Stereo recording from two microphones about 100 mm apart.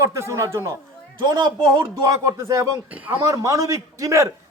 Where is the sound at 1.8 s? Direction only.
30° right (ahead or behind).